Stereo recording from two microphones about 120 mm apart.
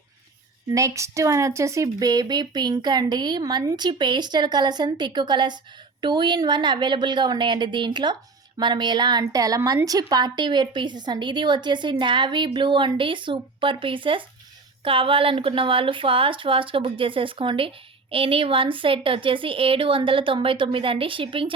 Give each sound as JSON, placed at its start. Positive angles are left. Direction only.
{"t": 0.7, "sound": "a woman's voice", "side_deg": -25}